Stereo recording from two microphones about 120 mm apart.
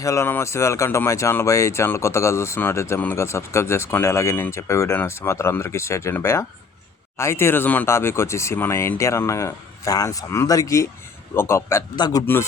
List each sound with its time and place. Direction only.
0.0 s speech: 25° left (ahead or behind)
11.9 s a man's voice: 35° left (ahead or behind)
12.2 s speech: 20° left (ahead or behind)